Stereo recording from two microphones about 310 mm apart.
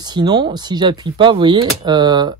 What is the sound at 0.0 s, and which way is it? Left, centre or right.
Speech, centre.